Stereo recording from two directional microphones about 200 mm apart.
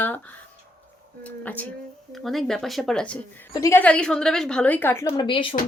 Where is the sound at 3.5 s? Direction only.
15° left (ahead or behind).